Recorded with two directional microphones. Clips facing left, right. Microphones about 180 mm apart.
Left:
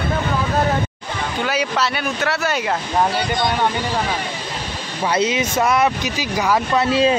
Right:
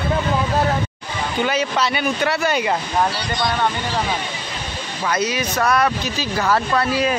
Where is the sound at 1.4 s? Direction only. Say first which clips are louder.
Right 1 dB; 5° left (ahead or behind).